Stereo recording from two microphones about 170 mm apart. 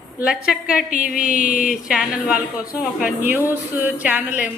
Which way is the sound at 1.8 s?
5° right (ahead or behind).